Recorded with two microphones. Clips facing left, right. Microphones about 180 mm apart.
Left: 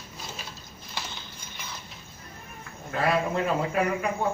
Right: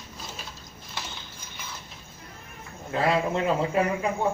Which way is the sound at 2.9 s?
20° right (ahead or behind).